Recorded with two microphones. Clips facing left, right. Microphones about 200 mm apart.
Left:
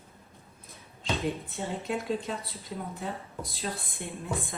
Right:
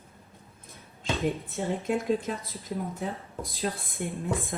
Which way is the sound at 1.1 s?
Centre (ahead or behind).